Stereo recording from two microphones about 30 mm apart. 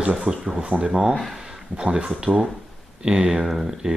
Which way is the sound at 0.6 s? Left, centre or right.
Right.